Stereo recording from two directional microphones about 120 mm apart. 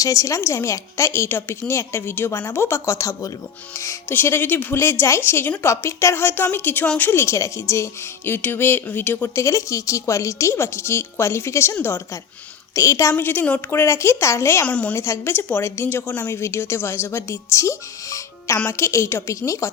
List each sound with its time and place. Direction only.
0.0 s speech: 30° left (ahead or behind); by 7.1 s 10° left (ahead or behind)
7.1 s speech: 20° left (ahead or behind)
14.7 s a woman's voice: 10° left (ahead or behind)
14.9 s speech: 20° left (ahead or behind)